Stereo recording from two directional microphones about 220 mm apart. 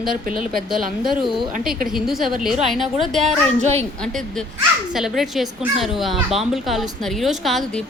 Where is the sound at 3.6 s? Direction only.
30° right (ahead or behind).